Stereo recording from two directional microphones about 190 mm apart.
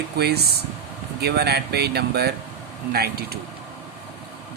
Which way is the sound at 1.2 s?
60° right (ahead or behind).